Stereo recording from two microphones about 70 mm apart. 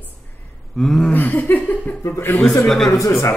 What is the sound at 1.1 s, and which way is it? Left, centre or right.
A woman's voice, left.